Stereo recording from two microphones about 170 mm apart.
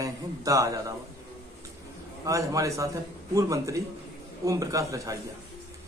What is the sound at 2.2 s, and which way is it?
A man's voice, 20° right (ahead or behind).